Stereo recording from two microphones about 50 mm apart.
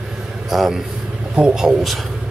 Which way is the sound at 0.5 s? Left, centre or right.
Centre.